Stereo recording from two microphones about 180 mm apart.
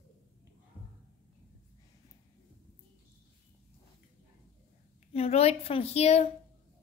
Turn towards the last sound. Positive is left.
turn(degrees=35)  # may be behind; listen again after turning